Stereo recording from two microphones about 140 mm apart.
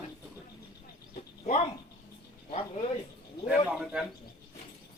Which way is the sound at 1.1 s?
55° left (ahead or behind).